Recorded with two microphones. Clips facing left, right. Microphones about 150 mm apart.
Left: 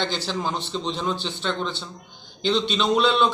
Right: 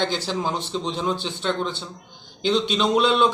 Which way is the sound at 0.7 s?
5° right (ahead or behind).